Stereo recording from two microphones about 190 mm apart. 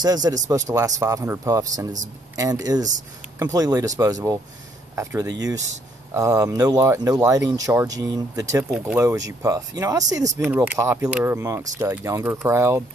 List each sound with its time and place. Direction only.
0.0 s speech: 20° right (ahead or behind)
8.6 s speech: 5° right (ahead or behind)
9.4 s speech: 20° right (ahead or behind)